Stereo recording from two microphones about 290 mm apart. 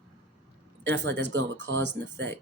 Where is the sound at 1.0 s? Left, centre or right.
Right.